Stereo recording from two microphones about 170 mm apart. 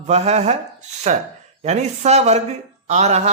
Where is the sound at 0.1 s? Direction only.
40° right (ahead or behind).